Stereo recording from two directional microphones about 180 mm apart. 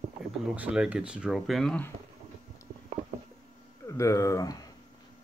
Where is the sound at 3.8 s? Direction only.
15° left (ahead or behind).